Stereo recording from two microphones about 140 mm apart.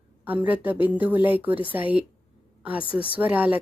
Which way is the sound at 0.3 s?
10° right (ahead or behind).